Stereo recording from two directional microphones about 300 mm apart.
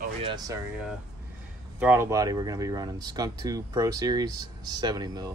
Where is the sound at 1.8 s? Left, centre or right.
Centre.